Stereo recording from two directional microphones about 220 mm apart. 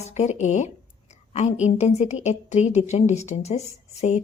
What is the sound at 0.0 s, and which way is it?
A woman's voice, 30° left (ahead or behind).